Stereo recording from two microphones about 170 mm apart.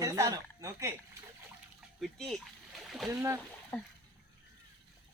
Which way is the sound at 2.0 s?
Centre (ahead or behind).